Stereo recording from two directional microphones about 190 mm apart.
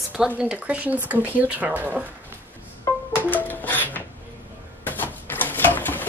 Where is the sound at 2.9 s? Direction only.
15° left (ahead or behind).